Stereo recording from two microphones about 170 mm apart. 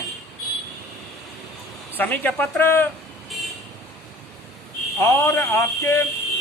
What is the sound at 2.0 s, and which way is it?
Speech, 10° left (ahead or behind).